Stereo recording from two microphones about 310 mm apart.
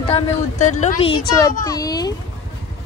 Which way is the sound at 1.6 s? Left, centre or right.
Centre.